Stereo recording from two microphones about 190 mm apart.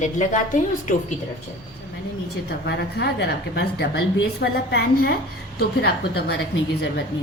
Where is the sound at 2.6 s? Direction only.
60° left (ahead or behind).